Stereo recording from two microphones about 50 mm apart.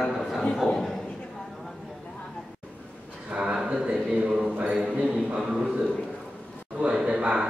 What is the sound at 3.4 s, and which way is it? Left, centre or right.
Speech, centre.